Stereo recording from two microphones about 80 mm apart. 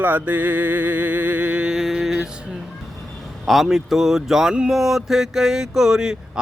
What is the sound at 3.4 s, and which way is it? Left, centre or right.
Speech, centre.